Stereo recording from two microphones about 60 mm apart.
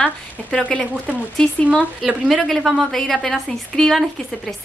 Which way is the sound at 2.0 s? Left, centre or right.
Centre.